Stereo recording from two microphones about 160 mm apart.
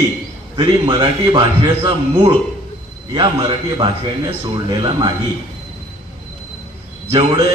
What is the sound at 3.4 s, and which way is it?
A man's voice, 30° right (ahead or behind).